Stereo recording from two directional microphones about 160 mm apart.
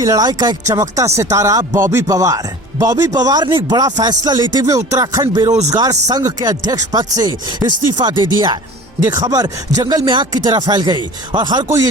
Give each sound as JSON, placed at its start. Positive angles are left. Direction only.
{"t": 0.0, "sound": "speech", "side_deg": -25}